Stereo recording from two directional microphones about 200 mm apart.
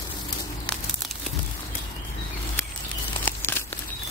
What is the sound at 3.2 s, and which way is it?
Crumpling, 10° left (ahead or behind).